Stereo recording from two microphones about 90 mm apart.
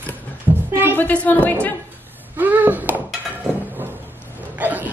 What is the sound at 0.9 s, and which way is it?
Speech, 20° left (ahead or behind).